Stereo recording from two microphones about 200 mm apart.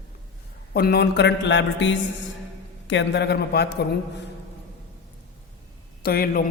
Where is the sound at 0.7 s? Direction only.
50° left (ahead or behind).